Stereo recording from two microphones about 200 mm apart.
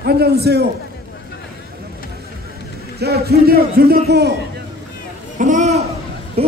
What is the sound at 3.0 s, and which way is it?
A man's voice, 50° right (ahead or behind).